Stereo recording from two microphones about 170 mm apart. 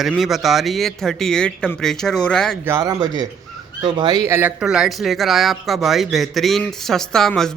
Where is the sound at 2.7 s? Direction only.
20° right (ahead or behind).